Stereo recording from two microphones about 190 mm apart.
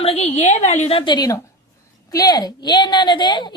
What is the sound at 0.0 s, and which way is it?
A woman's voice, 35° left (ahead or behind).